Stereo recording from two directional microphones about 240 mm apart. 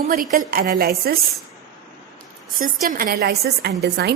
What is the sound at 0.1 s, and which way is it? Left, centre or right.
A woman's voice, right.